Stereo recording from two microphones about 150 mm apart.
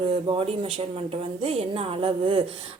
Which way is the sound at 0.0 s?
35° right (ahead or behind).